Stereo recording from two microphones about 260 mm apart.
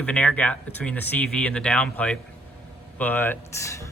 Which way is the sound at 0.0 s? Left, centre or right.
Centre.